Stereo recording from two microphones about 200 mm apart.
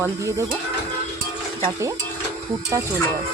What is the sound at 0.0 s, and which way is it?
Speech, 15° right (ahead or behind).